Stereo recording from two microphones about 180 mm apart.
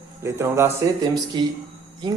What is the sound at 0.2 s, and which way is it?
A man's voice, 15° right (ahead or behind).